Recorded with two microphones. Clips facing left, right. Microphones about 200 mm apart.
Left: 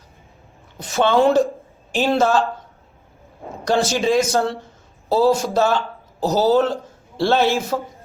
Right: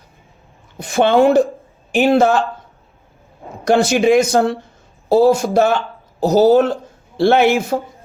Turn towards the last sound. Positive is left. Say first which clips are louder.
# right 5 dB
turn(degrees=-15)  # may be behind; listen again after turning